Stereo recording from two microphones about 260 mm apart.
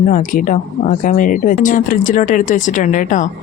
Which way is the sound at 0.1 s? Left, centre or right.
Left.